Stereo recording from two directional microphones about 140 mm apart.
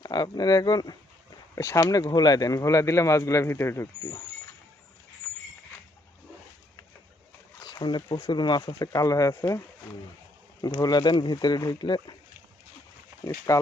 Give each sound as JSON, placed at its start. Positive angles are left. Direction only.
{"t": 0.0, "sound": "speech", "side_deg": 30}
{"t": 7.5, "sound": "speech", "side_deg": 30}
{"t": 10.6, "sound": "speech", "side_deg": 30}
{"t": 13.5, "sound": "speech", "side_deg": 25}